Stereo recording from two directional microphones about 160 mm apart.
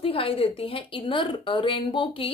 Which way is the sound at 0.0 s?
35° left (ahead or behind).